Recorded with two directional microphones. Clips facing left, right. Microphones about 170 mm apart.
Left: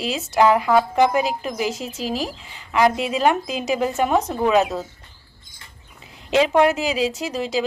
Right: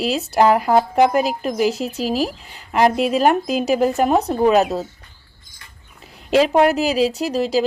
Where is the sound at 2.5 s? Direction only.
40° right (ahead or behind).